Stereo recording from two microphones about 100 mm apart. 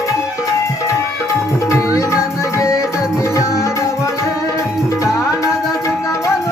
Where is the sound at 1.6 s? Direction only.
30° left (ahead or behind).